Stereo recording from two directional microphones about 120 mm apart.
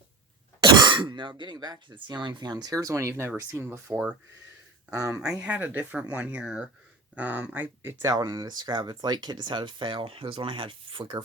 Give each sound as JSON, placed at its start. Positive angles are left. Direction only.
{"t": 0.6, "sound": "speech", "side_deg": -40}
{"t": 4.9, "sound": "speech", "side_deg": -25}
{"t": 5.2, "sound": "speech", "side_deg": -10}